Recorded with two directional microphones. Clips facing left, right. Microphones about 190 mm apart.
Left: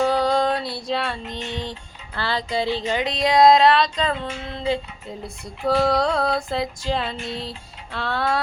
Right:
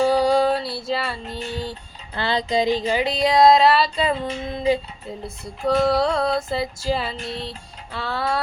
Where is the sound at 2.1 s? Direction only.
20° right (ahead or behind).